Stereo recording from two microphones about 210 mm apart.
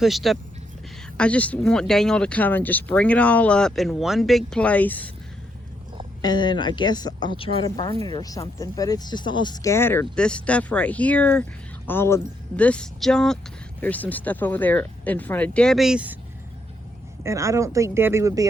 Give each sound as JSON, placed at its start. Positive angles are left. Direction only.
{"t": 0.0, "sound": "speech", "side_deg": 0}
{"t": 6.2, "sound": "a woman's voice", "side_deg": 20}
{"t": 17.2, "sound": "speech", "side_deg": -15}